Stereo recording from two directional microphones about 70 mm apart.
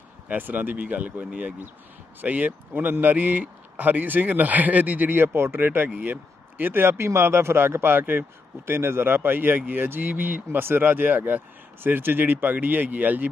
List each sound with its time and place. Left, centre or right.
0.3 s speech: right